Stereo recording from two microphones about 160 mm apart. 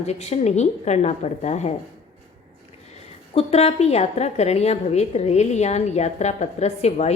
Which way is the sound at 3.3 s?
40° left (ahead or behind).